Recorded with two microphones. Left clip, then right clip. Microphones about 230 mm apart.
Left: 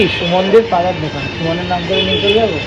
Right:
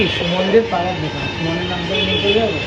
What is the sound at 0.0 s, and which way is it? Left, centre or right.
Speech, centre.